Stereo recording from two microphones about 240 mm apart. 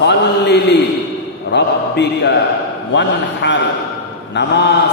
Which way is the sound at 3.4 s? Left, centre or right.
Left.